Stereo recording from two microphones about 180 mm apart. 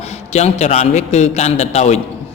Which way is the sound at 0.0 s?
35° left (ahead or behind).